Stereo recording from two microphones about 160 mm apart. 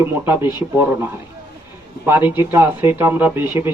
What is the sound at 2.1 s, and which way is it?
Speech, 15° right (ahead or behind).